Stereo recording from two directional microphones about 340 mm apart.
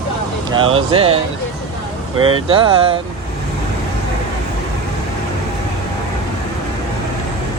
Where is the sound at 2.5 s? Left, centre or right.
Centre.